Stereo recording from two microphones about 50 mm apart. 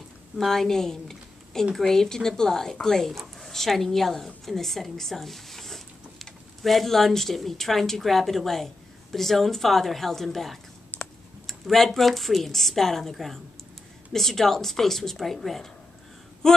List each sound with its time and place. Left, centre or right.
0.4 s a woman's voice: centre
10.9 s computer keyboard: left
11.4 s a woman's voice: centre